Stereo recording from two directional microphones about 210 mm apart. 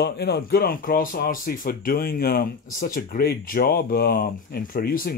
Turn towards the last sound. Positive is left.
turn(degrees=45)  # may be behind; listen again after turning